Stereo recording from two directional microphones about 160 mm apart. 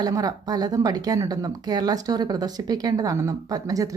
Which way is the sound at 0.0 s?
25° right (ahead or behind).